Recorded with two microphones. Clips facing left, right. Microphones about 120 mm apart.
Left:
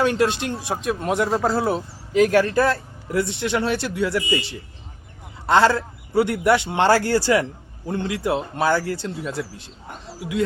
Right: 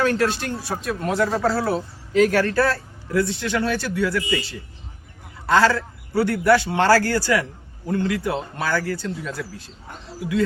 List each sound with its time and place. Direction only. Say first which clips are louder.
0.0 s a man's voice: left 1 dB; 20° left (ahead or behind)